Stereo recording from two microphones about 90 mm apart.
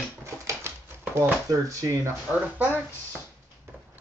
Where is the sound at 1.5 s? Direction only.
40° right (ahead or behind).